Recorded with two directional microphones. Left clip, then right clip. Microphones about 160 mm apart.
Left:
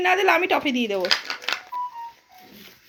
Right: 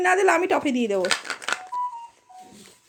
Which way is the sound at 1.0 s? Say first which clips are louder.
Left 2 dB; 60° right (ahead or behind).